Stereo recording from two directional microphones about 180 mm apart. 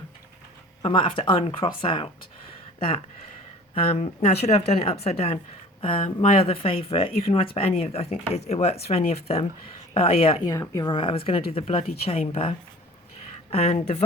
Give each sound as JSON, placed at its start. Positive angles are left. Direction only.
{"t": 0.8, "sound": "speech", "side_deg": 30}
{"t": 10.5, "sound": "speech", "side_deg": 20}